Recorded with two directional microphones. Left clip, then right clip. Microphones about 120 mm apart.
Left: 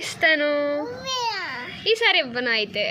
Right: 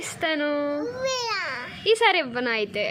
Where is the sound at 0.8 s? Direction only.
40° right (ahead or behind).